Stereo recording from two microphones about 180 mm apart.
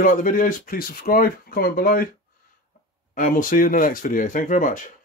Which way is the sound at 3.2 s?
50° left (ahead or behind).